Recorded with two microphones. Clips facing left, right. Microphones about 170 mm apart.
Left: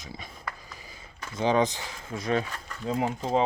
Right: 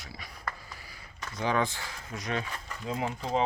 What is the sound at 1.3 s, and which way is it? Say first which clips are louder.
Speech: left 5 dB; 25° left (ahead or behind).